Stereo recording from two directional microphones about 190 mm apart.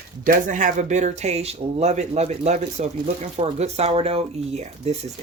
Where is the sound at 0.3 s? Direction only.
45° right (ahead or behind).